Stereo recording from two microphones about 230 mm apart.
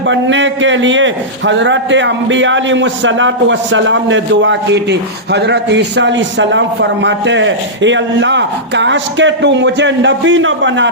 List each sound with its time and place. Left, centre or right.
0.1 s a man's voice: right